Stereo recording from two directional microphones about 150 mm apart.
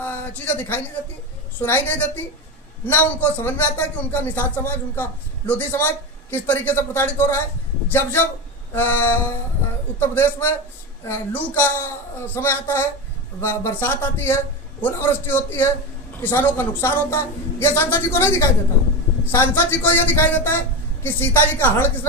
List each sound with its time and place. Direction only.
0.0 s a man's voice: 10° left (ahead or behind)
8.7 s a man's voice: 15° left (ahead or behind)